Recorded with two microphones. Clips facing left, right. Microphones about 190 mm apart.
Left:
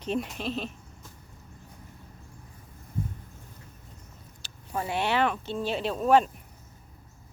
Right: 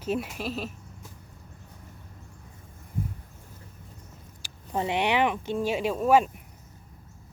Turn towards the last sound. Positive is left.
turn(degrees=-10)  # may be behind; listen again after turning